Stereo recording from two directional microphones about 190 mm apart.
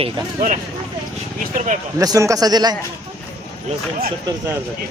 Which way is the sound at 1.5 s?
45° right (ahead or behind).